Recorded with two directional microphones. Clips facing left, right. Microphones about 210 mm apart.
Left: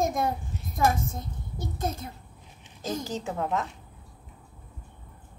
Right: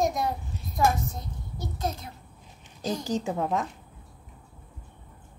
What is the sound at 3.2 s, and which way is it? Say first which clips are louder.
Speech: right 1 dB; 15° right (ahead or behind).